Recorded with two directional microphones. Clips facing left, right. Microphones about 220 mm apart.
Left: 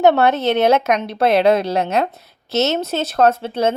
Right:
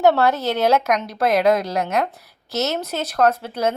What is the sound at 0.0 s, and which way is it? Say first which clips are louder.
Speech: left 3 dB; 20° left (ahead or behind).